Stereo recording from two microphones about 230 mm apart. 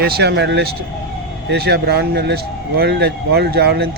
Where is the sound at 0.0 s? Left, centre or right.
Right.